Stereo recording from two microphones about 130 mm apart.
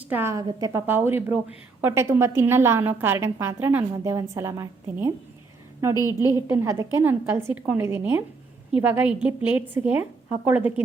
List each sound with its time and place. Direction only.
0.1 s a woman's voice: 20° right (ahead or behind)
6.1 s a woman's voice: 20° right (ahead or behind)